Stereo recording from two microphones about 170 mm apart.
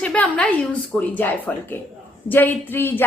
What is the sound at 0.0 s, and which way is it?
A woman's voice, 5° left (ahead or behind).